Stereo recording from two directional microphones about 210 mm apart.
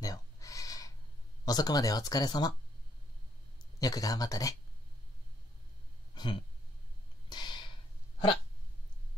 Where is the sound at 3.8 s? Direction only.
15° left (ahead or behind).